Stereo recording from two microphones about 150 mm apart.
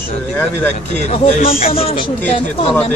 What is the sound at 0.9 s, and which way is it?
Speech, 50° left (ahead or behind).